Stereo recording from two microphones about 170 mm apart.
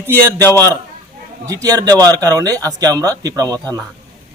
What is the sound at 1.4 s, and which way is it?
A man's voice, 20° right (ahead or behind).